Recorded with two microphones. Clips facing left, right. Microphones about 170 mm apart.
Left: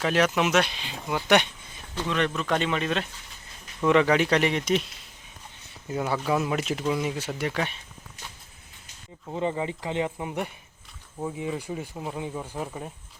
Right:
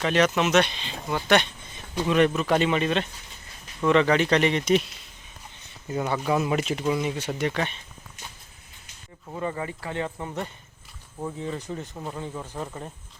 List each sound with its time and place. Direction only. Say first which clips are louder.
0.0 s speech: right 1 dB; 5° left (ahead or behind)
2.0 s speech: right 6 dB; 10° right (ahead or behind)
5.9 s speech: right 1 dB; 5° left (ahead or behind)
9.2 s speech: left 3 dB; 20° left (ahead or behind)